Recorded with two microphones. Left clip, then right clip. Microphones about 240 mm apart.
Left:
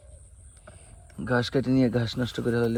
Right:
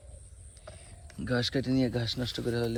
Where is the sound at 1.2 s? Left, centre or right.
Centre.